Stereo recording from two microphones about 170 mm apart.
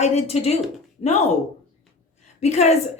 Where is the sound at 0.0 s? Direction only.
40° left (ahead or behind).